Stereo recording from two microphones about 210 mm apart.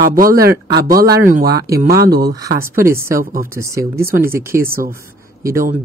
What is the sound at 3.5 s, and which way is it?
Speech, 15° right (ahead or behind).